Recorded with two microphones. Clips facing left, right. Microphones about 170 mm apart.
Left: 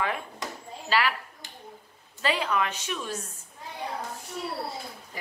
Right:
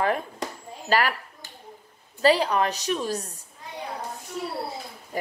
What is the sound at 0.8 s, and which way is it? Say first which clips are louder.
Speech: right 3 dB; 45° right (ahead or behind).